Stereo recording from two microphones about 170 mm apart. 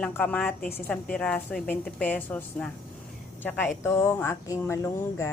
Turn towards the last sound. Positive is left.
turn(degrees=20)  # may be behind; listen again after turning